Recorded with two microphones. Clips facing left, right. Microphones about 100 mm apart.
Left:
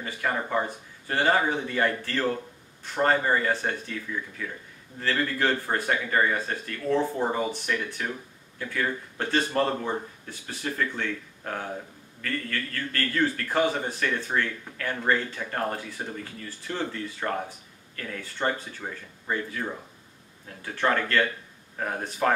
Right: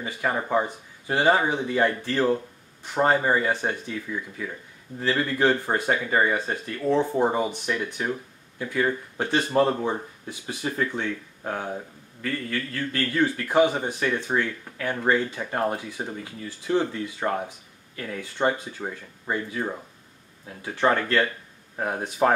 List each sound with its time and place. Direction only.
0.0 s speech: 15° right (ahead or behind)